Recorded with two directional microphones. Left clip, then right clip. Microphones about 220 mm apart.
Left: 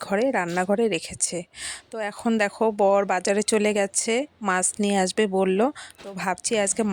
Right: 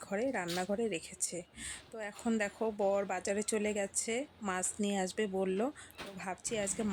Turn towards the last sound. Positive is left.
turn(degrees=45)  # may be behind; listen again after turning